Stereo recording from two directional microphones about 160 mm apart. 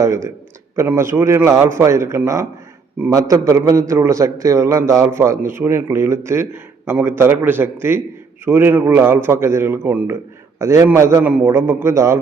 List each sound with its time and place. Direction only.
0.0 s a man's voice: 20° right (ahead or behind)